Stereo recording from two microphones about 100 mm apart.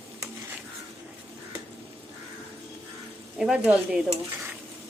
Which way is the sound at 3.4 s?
5° right (ahead or behind).